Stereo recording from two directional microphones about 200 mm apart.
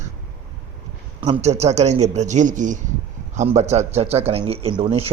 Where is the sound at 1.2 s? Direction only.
35° right (ahead or behind).